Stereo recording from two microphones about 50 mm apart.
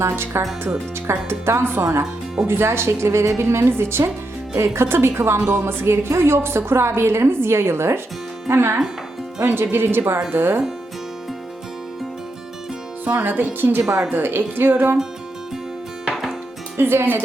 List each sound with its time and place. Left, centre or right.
0.0 s a woman's voice: right
13.1 s a woman's voice: right
16.0 s music: centre
16.7 s a woman's voice: right